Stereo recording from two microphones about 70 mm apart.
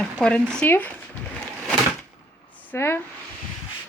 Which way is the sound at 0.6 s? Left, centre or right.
Left.